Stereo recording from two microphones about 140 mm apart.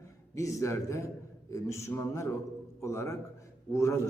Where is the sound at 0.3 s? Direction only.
20° left (ahead or behind).